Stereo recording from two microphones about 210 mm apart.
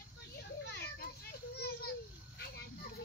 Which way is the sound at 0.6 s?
50° left (ahead or behind).